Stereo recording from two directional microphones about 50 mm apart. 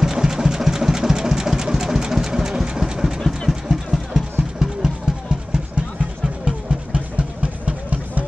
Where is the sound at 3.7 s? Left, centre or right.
Centre.